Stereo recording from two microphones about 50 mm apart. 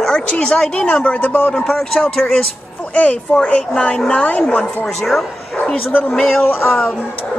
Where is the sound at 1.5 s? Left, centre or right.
Centre.